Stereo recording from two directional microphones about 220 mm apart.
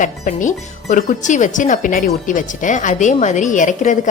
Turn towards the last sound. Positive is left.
turn(degrees=35)  # may be behind; listen again after turning